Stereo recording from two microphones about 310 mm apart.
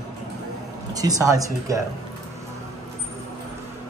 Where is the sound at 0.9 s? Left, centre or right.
Centre.